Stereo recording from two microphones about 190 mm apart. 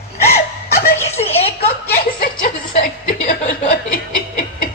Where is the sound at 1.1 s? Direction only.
30° left (ahead or behind).